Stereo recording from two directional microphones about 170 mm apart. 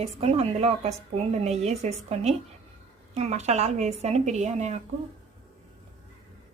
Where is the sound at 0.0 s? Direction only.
40° right (ahead or behind).